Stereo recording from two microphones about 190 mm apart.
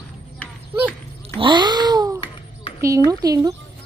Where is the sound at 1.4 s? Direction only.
25° right (ahead or behind).